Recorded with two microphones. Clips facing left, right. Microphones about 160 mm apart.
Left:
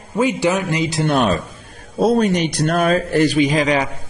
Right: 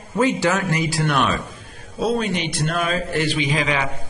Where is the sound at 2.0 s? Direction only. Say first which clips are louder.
Left 6 dB; 40° left (ahead or behind).